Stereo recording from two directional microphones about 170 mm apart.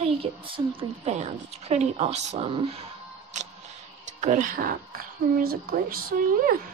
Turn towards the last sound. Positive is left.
turn(degrees=-55)  # may be behind; listen again after turning